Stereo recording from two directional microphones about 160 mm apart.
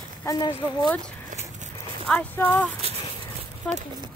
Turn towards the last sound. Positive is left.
turn(degrees=5)  # may be behind; listen again after turning